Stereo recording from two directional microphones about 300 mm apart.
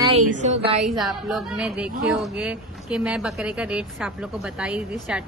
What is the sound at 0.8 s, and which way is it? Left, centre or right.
A woman's voice, centre.